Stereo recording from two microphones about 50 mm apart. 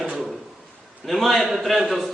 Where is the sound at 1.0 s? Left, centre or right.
Centre.